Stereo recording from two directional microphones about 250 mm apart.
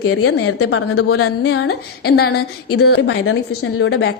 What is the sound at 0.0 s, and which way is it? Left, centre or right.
Speech, left.